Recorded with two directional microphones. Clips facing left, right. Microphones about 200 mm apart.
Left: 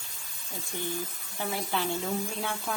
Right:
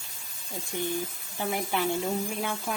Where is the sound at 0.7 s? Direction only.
15° right (ahead or behind).